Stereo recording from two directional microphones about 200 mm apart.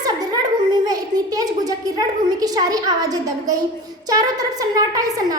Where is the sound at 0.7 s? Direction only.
20° right (ahead or behind).